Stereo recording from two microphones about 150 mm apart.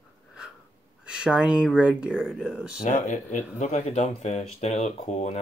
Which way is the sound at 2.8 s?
55° left (ahead or behind).